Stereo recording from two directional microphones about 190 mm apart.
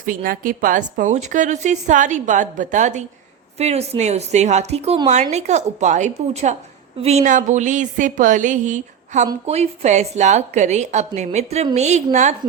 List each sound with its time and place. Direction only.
0.0 s a woman's voice: 45° right (ahead or behind)